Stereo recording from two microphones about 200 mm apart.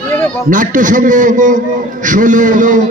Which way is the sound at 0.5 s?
40° right (ahead or behind).